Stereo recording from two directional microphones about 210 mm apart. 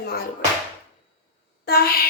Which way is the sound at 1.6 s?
45° left (ahead or behind).